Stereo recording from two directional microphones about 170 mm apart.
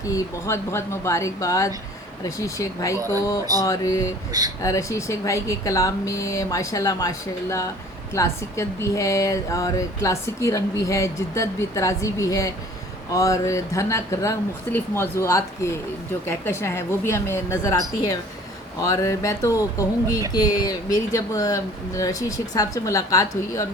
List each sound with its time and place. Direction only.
0.0 s speech: 20° left (ahead or behind)
4.3 s speech: 20° right (ahead or behind)
4.6 s speech: 20° left (ahead or behind)